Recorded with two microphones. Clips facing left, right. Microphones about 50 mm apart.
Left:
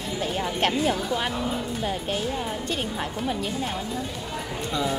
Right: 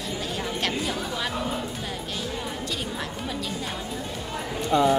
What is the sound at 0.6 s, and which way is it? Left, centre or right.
Speech, left.